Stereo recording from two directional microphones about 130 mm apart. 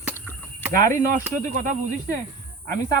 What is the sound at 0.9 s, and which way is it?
Speech, 85° right.